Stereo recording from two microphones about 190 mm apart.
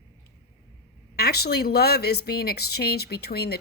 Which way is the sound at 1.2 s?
55° left (ahead or behind).